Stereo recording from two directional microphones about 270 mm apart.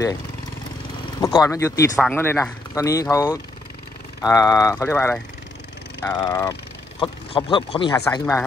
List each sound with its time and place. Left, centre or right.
1.4 s speech: centre